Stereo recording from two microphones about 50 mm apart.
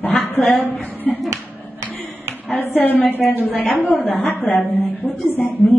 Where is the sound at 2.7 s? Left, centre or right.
Left.